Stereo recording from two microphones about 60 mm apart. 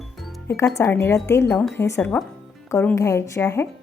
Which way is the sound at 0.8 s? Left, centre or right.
Left.